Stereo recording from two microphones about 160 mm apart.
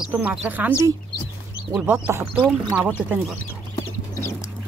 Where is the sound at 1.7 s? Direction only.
5° right (ahead or behind).